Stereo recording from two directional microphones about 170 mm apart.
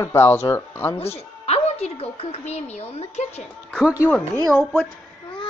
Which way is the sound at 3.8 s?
10° right (ahead or behind).